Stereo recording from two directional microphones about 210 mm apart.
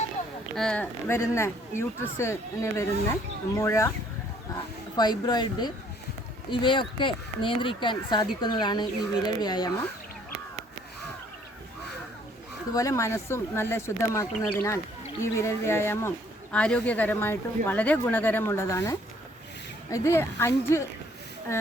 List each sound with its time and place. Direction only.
0.5 s speech: 5° left (ahead or behind)
4.9 s speech: 20° left (ahead or behind)
12.7 s speech: 15° left (ahead or behind)